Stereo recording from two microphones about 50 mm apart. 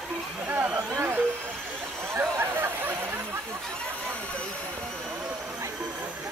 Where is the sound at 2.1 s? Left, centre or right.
Right.